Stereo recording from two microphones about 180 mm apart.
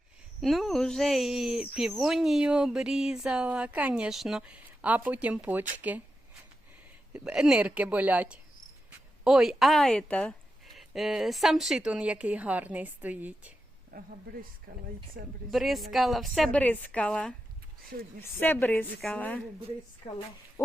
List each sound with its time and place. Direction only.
0.4 s speech: centre (ahead or behind)
7.1 s speech: 5° right (ahead or behind)
13.9 s speech: 60° right (ahead or behind)
15.4 s a woman's voice: centre (ahead or behind)